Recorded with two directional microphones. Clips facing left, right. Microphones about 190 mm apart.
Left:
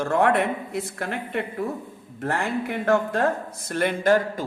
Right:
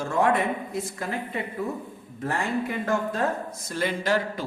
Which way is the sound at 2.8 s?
60° left (ahead or behind).